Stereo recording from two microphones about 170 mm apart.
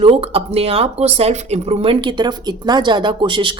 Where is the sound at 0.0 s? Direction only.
35° right (ahead or behind).